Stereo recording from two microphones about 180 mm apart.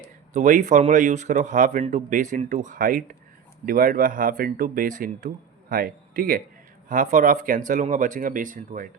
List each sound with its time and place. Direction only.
0.3 s a man's voice: 45° right (ahead or behind)